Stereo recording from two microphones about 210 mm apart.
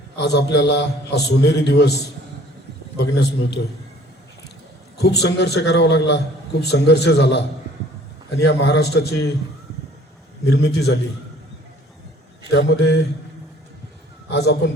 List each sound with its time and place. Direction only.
0.2 s a man's voice: 55° left (ahead or behind)
3.0 s a man's voice: 50° left (ahead or behind)
4.9 s a man's voice: 50° left (ahead or behind)
8.4 s a man's voice: 55° left (ahead or behind)
10.4 s a man's voice: 50° left (ahead or behind)
12.5 s a man's voice: 55° left (ahead or behind)
14.3 s a man's voice: 50° left (ahead or behind)